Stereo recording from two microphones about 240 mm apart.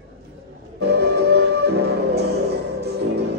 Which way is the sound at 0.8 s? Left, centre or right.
Right.